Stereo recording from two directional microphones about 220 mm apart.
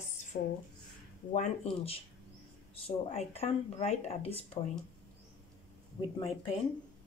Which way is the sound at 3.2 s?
30° left (ahead or behind).